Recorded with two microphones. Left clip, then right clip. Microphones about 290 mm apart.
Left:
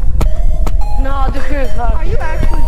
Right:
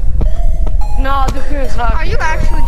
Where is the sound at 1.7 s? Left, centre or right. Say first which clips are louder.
Right 3 dB; right.